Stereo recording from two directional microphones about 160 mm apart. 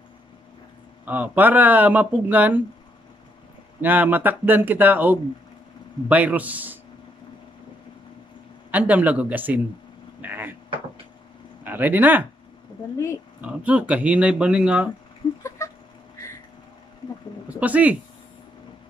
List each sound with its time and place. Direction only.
1.0 s speech: 10° right (ahead or behind)
3.8 s speech: 10° right (ahead or behind)
8.7 s speech: 10° right (ahead or behind)
10.2 s vehicle: 10° right (ahead or behind)
11.6 s speech: 10° right (ahead or behind)
13.4 s speech: 10° right (ahead or behind)
15.4 s a sound: 20° left (ahead or behind)
17.6 s speech: 10° right (ahead or behind)